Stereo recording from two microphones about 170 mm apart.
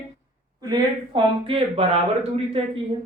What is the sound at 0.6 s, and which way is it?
Speech, 25° right (ahead or behind).